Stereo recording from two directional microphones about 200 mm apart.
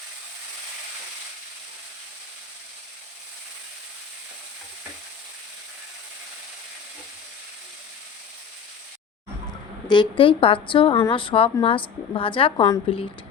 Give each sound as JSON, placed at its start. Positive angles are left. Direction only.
{"t": 9.8, "sound": "a woman's voice", "side_deg": 25}